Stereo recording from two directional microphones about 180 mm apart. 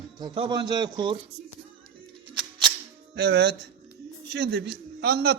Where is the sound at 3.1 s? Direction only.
65° right (ahead or behind).